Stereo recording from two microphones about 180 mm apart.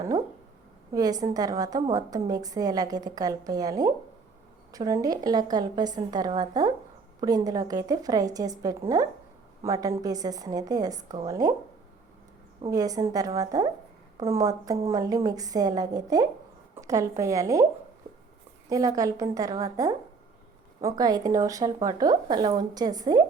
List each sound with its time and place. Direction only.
0.9 s a woman's voice: 20° right (ahead or behind)
12.7 s a woman's voice: 20° right (ahead or behind)
18.7 s a woman's voice: 20° right (ahead or behind)